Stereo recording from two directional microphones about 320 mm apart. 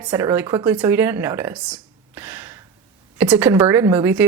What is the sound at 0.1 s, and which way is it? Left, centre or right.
A woman's voice, centre.